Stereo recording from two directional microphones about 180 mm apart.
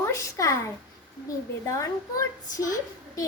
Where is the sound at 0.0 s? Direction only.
15° left (ahead or behind).